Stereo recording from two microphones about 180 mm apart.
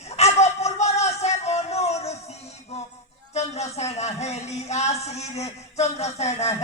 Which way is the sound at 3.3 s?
40° left (ahead or behind).